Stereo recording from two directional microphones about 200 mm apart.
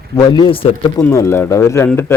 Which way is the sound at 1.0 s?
10° left (ahead or behind).